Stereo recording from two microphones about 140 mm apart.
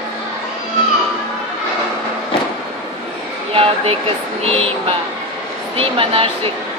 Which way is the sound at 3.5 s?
40° right (ahead or behind).